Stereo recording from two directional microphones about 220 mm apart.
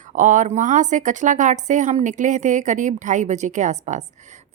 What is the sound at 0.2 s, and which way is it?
Speech, 35° right (ahead or behind).